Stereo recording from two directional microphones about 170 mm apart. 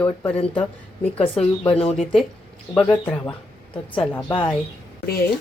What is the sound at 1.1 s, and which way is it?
Speech, 35° left (ahead or behind).